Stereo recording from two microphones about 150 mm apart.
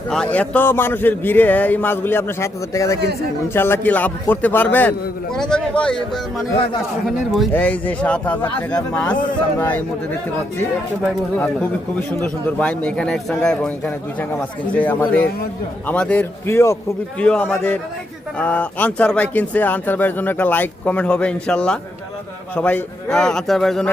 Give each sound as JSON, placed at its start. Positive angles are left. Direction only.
{"t": 0.1, "sound": "a man's voice", "side_deg": 5}
{"t": 7.5, "sound": "speech", "side_deg": 10}
{"t": 11.9, "sound": "speech", "side_deg": 10}
{"t": 17.2, "sound": "a man's voice", "side_deg": 10}